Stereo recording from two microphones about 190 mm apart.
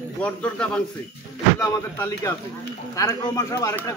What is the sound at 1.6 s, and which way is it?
Speech, 15° left (ahead or behind).